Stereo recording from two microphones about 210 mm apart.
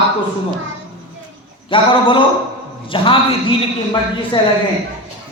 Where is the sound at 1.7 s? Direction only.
25° left (ahead or behind).